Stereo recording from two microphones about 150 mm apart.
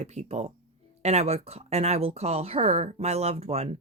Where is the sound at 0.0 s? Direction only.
50° right (ahead or behind).